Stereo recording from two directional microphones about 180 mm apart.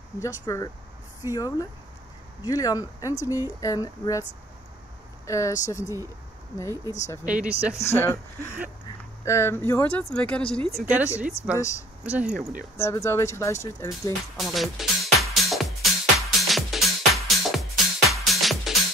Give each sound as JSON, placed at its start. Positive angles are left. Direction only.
{"t": 0.2, "sound": "speech", "side_deg": 15}
{"t": 1.3, "sound": "a sound", "side_deg": 20}
{"t": 5.2, "sound": "speech", "side_deg": 15}
{"t": 7.2, "sound": "speech", "side_deg": -5}
{"t": 7.7, "sound": "speech", "side_deg": 15}
{"t": 10.8, "sound": "speech", "side_deg": -10}
{"t": 12.7, "sound": "speech", "side_deg": 15}
{"t": 14.3, "sound": "speech", "side_deg": 0}
{"t": 15.3, "sound": "music", "side_deg": 0}